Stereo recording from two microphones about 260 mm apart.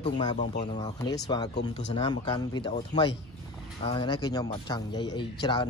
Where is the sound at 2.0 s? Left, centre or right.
Centre.